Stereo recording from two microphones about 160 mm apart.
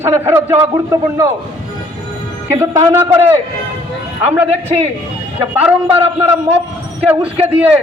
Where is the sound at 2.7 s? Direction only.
20° right (ahead or behind).